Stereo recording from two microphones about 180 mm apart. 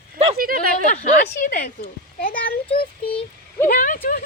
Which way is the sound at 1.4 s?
50° left (ahead or behind).